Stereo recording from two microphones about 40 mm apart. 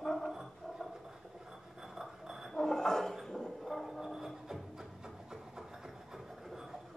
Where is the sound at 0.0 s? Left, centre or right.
Centre.